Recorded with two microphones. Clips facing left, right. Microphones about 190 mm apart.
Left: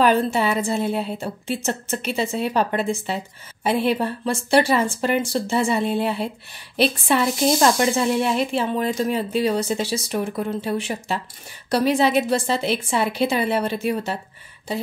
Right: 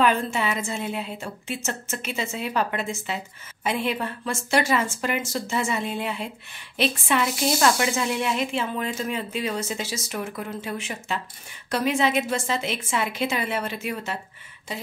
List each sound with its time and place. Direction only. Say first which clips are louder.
0.0 s speech: left 4 dB; 35° left (ahead or behind)